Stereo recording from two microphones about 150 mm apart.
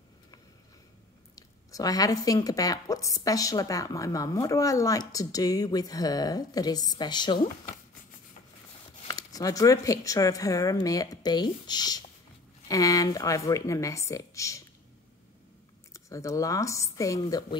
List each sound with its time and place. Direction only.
1.3 s speech: 25° left (ahead or behind)
9.0 s speech: 25° left (ahead or behind)
15.9 s speech: 20° left (ahead or behind)